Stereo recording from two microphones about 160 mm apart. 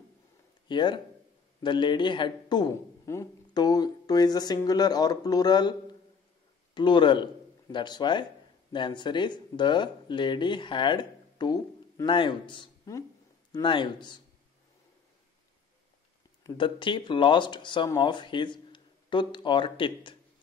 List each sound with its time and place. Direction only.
0.7 s a man's voice: 30° left (ahead or behind)
16.5 s speech: 30° left (ahead or behind)